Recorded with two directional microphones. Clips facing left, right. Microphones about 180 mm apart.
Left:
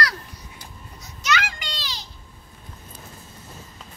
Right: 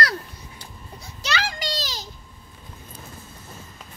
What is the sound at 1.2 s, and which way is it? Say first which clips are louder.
Children playing: left 1 dB; 30° right (ahead or behind).